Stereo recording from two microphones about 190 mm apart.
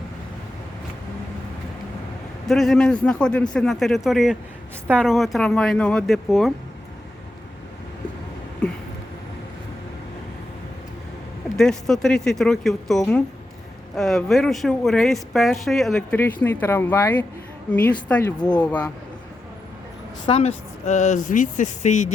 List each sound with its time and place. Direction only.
2.5 s a woman's voice: centre (ahead or behind)
8.6 s a sound: 5° left (ahead or behind)
11.5 s a woman's voice: 5° left (ahead or behind)
20.2 s speech: 30° left (ahead or behind)